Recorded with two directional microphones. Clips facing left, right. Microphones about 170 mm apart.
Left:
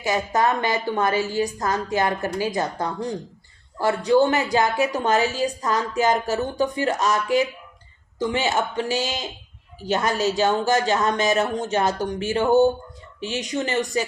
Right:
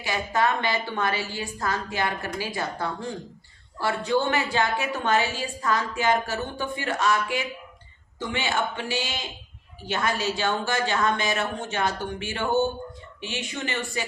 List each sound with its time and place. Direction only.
0.0 s a woman's voice: 45° left (ahead or behind)